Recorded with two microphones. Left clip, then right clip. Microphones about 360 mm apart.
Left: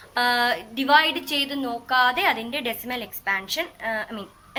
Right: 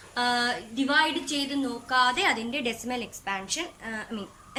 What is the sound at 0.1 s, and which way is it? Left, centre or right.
A woman's voice, centre.